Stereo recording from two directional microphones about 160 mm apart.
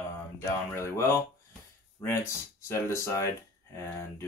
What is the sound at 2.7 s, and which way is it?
Speech, 20° left (ahead or behind).